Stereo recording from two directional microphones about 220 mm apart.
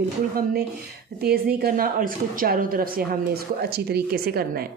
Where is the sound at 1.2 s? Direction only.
45° right (ahead or behind).